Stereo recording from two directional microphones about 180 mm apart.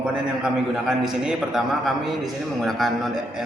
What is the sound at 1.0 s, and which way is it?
A man's voice, 5° right (ahead or behind).